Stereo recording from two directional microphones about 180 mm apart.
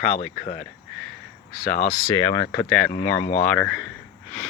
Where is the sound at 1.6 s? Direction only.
55° left (ahead or behind).